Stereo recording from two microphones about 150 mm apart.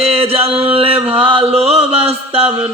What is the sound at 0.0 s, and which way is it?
Chant, 40° right (ahead or behind).